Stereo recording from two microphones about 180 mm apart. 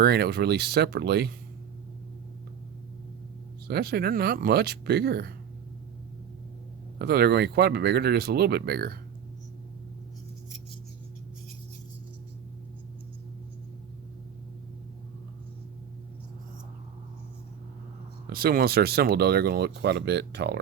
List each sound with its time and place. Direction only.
0.0 s speech: 60° right (ahead or behind)
3.7 s speech: 60° right (ahead or behind)
7.0 s speech: 60° right (ahead or behind)
18.3 s speech: 55° right (ahead or behind)